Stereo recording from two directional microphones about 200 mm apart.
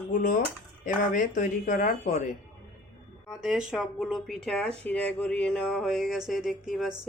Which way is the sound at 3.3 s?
Centre (ahead or behind).